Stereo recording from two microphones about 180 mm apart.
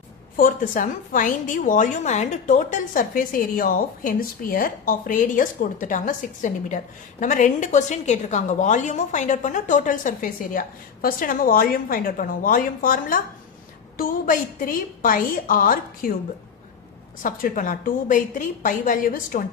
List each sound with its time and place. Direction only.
0.3 s a woman's voice: 50° left (ahead or behind)
17.2 s a woman's voice: 50° left (ahead or behind)